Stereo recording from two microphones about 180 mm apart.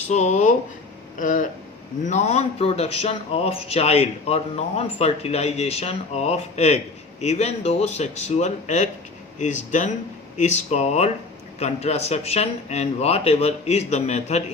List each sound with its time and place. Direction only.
0.1 s a man's voice: 40° left (ahead or behind)